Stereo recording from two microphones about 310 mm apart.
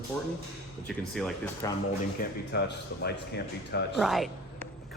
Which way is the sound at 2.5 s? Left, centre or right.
Left.